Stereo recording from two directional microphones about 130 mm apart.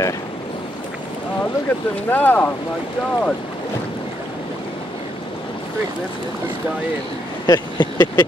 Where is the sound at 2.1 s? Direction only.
15° left (ahead or behind).